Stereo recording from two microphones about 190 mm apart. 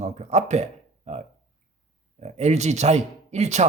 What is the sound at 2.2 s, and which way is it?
Speech, 35° right (ahead or behind).